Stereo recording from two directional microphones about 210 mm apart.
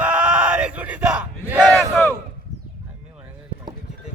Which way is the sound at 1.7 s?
5° left (ahead or behind).